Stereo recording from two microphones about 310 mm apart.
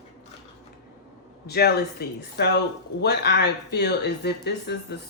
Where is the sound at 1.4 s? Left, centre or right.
Left.